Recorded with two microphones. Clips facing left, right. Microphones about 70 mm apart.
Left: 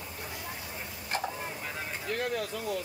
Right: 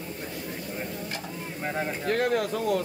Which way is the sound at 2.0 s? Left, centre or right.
Right.